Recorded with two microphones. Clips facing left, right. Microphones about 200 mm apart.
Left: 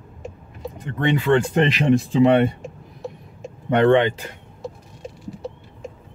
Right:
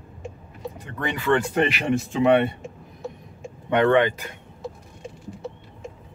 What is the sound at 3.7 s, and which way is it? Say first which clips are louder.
Speech: left 3 dB; 30° left (ahead or behind).